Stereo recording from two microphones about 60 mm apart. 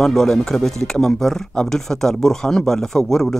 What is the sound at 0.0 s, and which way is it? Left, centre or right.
Speech, centre.